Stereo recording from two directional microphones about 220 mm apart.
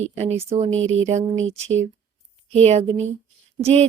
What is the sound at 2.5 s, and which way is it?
Speech, 30° right (ahead or behind).